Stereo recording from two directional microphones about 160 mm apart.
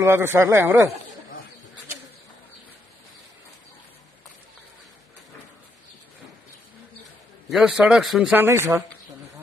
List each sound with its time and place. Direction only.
0.0 s speech: 15° right (ahead or behind)
7.4 s a man's voice: centre (ahead or behind)
8.5 s speech: 15° right (ahead or behind)